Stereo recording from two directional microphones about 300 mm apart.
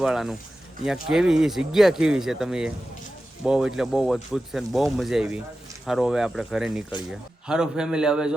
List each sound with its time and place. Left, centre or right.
0.0 s speech: centre